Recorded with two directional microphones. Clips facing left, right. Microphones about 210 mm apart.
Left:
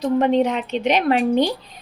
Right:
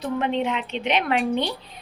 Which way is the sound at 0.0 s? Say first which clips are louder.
Left 7 dB; 40° left (ahead or behind).